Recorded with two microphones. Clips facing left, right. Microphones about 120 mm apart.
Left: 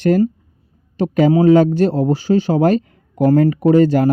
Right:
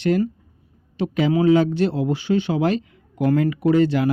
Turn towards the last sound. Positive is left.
turn(degrees=40)  # may be behind; listen again after turning